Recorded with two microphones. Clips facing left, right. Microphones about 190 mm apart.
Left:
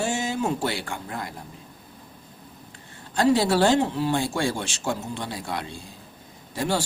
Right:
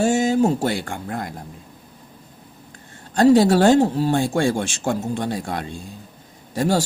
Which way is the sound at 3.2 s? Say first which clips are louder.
Right 6 dB; 45° right (ahead or behind).